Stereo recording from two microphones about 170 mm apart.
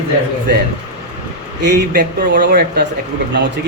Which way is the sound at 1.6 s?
90° right.